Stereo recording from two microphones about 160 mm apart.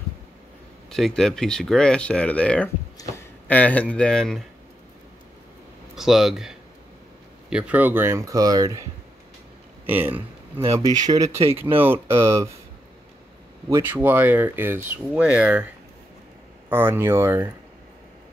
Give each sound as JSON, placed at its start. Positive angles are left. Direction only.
{"t": 0.8, "sound": "speech", "side_deg": 0}
{"t": 5.9, "sound": "speech", "side_deg": 0}
{"t": 9.8, "sound": "speech", "side_deg": -10}
{"t": 10.8, "sound": "speech", "side_deg": -25}
{"t": 13.7, "sound": "speech", "side_deg": -15}
{"t": 16.6, "sound": "speech", "side_deg": -15}